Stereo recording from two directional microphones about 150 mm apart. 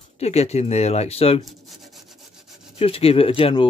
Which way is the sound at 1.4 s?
Centre (ahead or behind).